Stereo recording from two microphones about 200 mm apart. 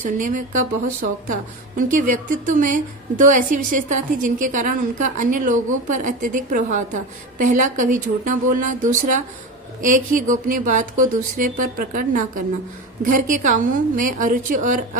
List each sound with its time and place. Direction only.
0.0 s a woman's voice: 40° right (ahead or behind)